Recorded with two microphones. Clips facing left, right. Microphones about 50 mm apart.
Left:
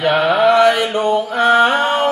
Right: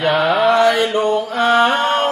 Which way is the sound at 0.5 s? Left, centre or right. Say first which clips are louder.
Left 2 dB; left.